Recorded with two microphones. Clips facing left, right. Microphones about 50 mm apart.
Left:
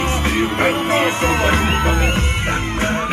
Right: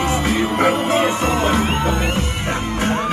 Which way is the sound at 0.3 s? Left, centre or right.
Left.